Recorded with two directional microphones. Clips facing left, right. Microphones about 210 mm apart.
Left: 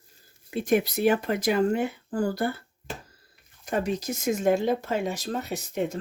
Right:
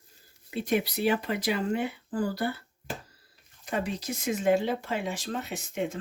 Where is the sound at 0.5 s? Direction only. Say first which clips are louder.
Left 4 dB; 45° left (ahead or behind).